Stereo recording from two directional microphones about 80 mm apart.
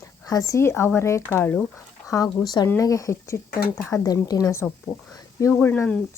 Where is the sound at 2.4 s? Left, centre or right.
Left.